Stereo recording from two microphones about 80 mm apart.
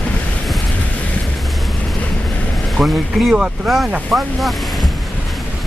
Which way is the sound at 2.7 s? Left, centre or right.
Centre.